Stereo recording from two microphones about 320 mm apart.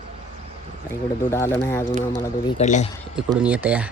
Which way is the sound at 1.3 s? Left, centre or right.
Centre.